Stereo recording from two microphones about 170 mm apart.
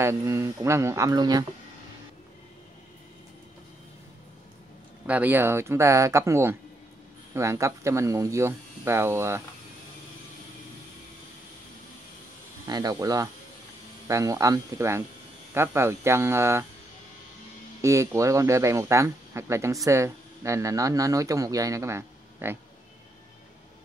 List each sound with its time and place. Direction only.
0.0 s speech: 15° right (ahead or behind)
5.0 s speech: 10° right (ahead or behind)
12.6 s speech: 20° right (ahead or behind)
17.8 s speech: 15° right (ahead or behind)